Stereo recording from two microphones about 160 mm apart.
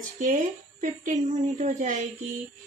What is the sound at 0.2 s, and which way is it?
A woman's voice, 50° right (ahead or behind).